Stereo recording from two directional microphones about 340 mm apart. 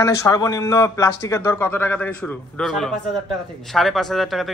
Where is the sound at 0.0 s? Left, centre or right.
Centre.